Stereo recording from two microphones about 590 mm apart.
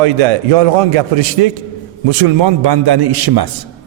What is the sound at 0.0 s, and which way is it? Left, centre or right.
A man's voice, right.